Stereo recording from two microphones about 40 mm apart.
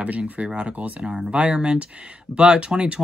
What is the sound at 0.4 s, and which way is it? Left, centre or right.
Speech, right.